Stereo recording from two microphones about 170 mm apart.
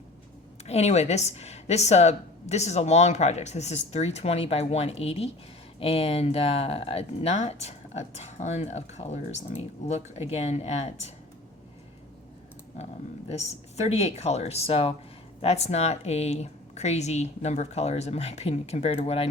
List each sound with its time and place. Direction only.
0.6 s speech: 40° left (ahead or behind)
12.7 s speech: 40° left (ahead or behind)